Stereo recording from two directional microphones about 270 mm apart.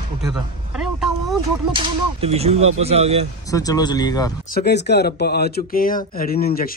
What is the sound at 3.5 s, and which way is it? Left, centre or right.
Speech, centre.